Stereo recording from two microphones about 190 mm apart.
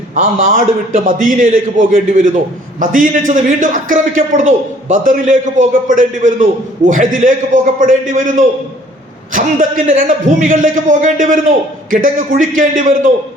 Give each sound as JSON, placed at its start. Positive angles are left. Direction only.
{"t": 0.1, "sound": "a man's voice", "side_deg": -40}